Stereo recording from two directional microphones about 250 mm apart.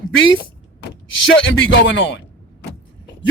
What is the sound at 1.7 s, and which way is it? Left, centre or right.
Speech, left.